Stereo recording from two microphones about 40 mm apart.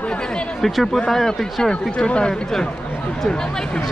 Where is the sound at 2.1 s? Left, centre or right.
Left.